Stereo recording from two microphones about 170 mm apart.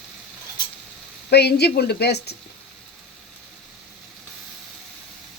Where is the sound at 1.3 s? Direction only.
75° left (ahead or behind).